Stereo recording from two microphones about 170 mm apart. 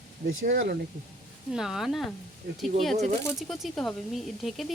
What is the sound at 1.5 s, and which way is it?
Speech, centre (ahead or behind).